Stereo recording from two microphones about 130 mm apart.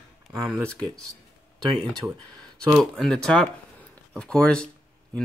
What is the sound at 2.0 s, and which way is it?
Speech, 15° right (ahead or behind).